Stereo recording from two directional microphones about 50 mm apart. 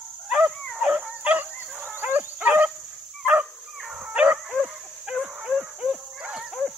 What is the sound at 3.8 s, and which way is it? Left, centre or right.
Dog, centre.